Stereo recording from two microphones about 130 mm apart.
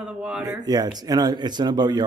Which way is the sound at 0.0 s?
10° right (ahead or behind).